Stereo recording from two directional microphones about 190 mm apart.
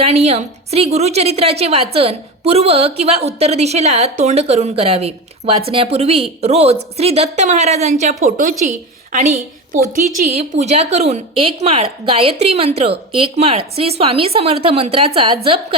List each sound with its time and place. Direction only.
0.0 s a woman's voice: 35° right (ahead or behind)